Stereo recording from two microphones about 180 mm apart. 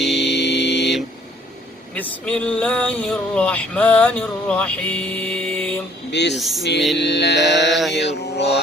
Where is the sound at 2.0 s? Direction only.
5° left (ahead or behind).